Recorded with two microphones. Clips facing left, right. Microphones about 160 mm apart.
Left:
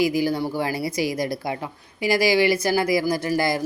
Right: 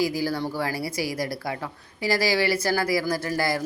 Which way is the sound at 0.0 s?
15° left (ahead or behind).